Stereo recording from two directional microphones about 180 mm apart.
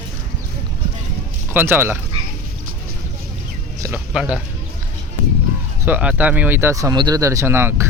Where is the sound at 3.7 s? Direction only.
15° right (ahead or behind).